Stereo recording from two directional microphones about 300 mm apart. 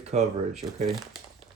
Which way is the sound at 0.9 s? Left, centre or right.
Centre.